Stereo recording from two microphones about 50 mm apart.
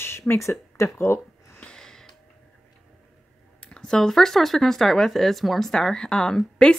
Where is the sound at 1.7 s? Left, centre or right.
Centre.